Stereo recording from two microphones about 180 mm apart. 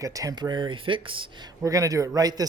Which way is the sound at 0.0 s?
20° right (ahead or behind).